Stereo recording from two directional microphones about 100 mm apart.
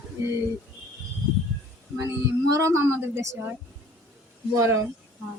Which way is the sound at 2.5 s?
30° right (ahead or behind).